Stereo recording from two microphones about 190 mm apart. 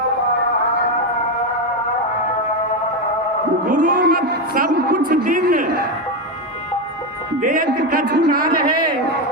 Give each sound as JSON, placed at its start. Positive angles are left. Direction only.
{"t": 3.7, "sound": "a man's voice", "side_deg": -40}
{"t": 4.0, "sound": "a man's voice", "side_deg": -55}
{"t": 7.4, "sound": "a man's voice", "side_deg": -45}